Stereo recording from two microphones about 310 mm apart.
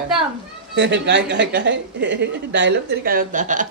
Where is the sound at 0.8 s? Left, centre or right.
Right.